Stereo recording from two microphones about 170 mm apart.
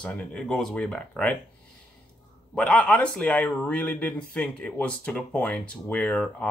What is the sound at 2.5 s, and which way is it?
Speech, 5° left (ahead or behind).